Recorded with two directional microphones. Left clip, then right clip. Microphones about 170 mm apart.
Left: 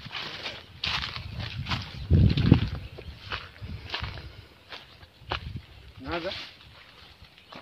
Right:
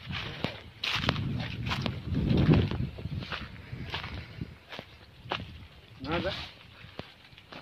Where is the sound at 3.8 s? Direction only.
15° left (ahead or behind).